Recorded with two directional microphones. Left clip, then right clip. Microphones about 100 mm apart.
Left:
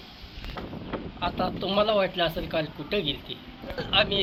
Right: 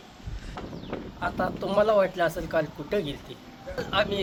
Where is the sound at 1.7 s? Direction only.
25° right (ahead or behind).